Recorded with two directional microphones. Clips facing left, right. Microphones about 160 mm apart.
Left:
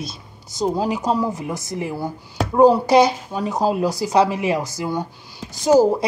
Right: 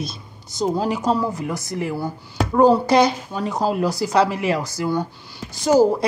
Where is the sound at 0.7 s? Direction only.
15° left (ahead or behind).